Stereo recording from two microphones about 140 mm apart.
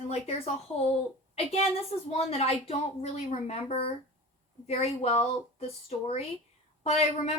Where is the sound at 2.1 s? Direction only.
45° left (ahead or behind).